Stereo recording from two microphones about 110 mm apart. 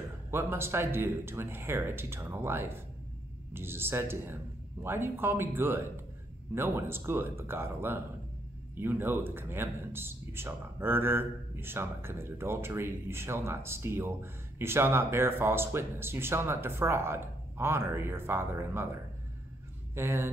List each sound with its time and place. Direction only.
0.3 s a man's voice: 20° right (ahead or behind)
20.0 s a man's voice: 20° right (ahead or behind)